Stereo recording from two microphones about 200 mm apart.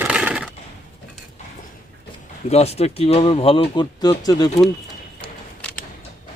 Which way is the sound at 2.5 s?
30° left (ahead or behind).